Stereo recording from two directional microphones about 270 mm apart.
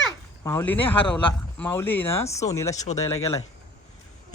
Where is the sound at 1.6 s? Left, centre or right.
Centre.